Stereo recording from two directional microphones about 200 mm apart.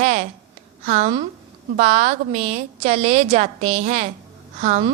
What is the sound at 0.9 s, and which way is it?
A woman's voice, 35° right (ahead or behind).